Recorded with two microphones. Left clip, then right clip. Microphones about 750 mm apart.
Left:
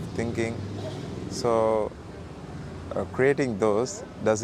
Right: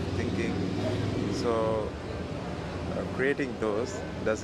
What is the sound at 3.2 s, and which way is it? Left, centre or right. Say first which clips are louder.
Speech: left 6 dB; left.